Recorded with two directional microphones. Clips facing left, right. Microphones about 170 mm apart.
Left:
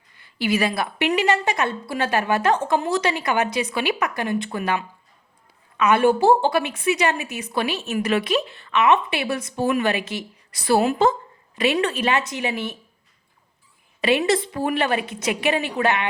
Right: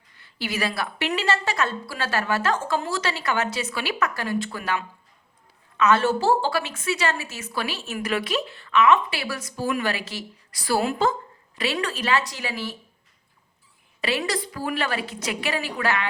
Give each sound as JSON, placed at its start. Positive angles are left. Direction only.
{"t": 0.2, "sound": "a woman's voice", "side_deg": 15}
{"t": 14.0, "sound": "a woman's voice", "side_deg": 20}